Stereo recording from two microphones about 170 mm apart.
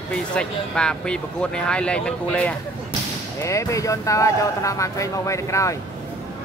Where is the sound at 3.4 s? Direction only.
20° left (ahead or behind).